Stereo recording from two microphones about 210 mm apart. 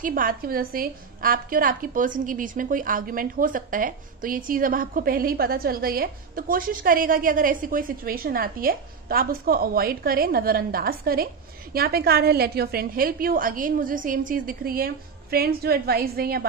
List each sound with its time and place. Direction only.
0.0 s a woman's voice: 40° right (ahead or behind)